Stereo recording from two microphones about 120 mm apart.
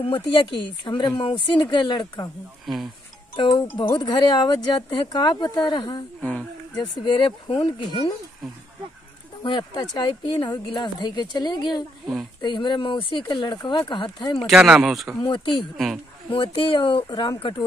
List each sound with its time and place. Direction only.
0.0 s speech: 45° left (ahead or behind)
2.6 s speech: centre (ahead or behind)
3.3 s speech: 40° left (ahead or behind)
9.4 s speech: 40° left (ahead or behind)
14.4 s speech: 5° right (ahead or behind)
15.2 s speech: 45° left (ahead or behind)